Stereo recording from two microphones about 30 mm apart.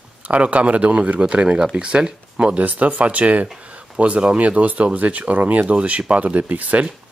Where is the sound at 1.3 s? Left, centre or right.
Right.